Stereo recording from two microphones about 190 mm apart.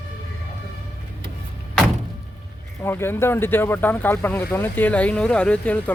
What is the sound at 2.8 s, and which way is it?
Speech, 10° left (ahead or behind).